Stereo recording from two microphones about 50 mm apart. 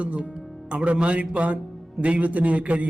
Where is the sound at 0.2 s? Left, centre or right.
Centre.